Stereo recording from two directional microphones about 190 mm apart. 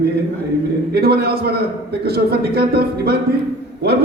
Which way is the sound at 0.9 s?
55° right (ahead or behind).